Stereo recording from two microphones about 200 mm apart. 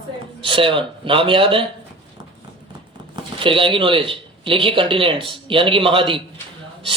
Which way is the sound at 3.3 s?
25° right (ahead or behind).